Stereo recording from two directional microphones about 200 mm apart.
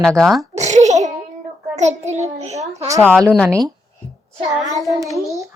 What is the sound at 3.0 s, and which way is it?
Speech, 5° left (ahead or behind).